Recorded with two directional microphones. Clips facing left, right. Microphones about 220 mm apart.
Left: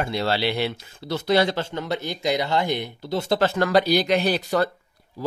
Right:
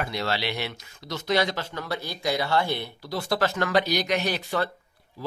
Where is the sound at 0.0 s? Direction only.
30° left (ahead or behind).